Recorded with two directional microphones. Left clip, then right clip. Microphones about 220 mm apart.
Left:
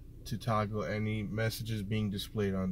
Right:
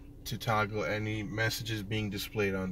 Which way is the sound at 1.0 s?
Centre (ahead or behind).